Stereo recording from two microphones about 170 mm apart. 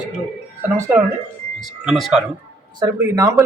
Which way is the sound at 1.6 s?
Centre (ahead or behind).